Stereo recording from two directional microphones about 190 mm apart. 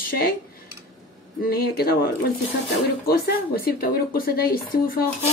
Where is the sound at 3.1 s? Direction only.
50° left (ahead or behind).